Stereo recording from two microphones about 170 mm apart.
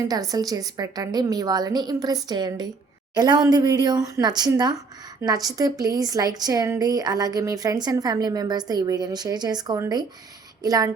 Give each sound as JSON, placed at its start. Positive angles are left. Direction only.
{"t": 0.1, "sound": "a woman's voice", "side_deg": -20}